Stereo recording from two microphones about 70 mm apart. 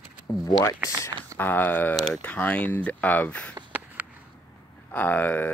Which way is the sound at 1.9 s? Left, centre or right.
Centre.